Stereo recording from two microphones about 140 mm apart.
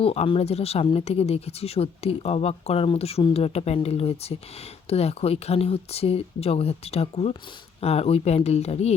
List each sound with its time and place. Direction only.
0.0 s speech: 45° left (ahead or behind)